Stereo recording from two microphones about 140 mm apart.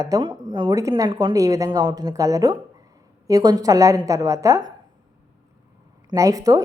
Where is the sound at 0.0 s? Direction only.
30° right (ahead or behind).